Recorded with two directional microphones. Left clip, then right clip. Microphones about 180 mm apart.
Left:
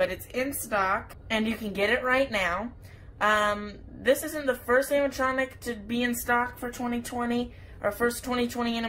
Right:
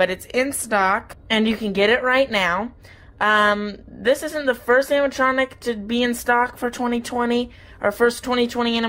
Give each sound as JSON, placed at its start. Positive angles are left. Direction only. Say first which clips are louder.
{"t": 0.0, "sound": "a woman's voice", "louder": "right 8 dB", "side_deg": -45}